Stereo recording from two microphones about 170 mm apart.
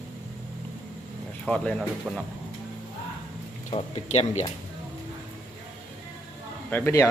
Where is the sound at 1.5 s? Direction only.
5° left (ahead or behind).